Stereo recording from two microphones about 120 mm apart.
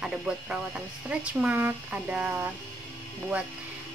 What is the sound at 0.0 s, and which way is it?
Speech, 10° right (ahead or behind).